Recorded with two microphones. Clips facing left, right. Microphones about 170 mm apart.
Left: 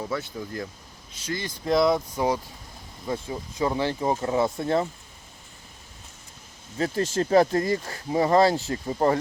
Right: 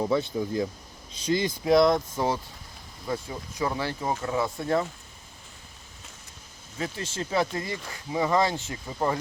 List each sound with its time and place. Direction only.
0.1 s speech: 20° right (ahead or behind)
1.6 s speech: centre (ahead or behind)
2.1 s speech: 15° left (ahead or behind)
6.7 s speech: 40° left (ahead or behind)